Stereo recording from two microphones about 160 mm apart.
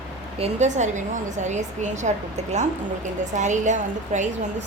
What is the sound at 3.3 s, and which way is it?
Speech, 50° right (ahead or behind).